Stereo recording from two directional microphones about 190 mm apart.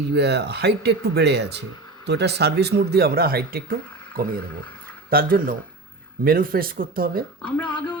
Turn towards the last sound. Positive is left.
turn(degrees=25)  # may be behind; listen again after turning